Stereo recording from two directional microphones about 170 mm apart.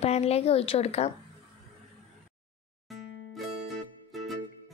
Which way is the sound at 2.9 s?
Centre (ahead or behind).